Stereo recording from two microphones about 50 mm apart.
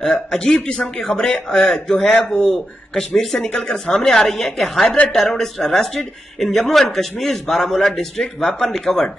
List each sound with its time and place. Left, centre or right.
0.0 s speech: centre
4.8 s a woman's voice: left
5.4 s speech: centre